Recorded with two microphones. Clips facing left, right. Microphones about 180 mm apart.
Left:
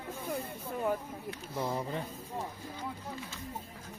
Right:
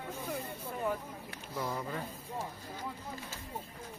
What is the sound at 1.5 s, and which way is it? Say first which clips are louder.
Speech: left 2 dB; 25° left (ahead or behind).